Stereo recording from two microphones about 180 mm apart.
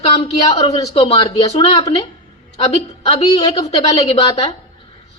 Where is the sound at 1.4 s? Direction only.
20° left (ahead or behind).